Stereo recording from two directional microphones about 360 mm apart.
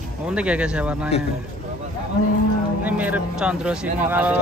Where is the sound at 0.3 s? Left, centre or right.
Centre.